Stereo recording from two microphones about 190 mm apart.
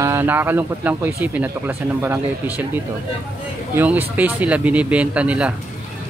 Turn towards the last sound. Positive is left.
turn(degrees=-5)  # may be behind; listen again after turning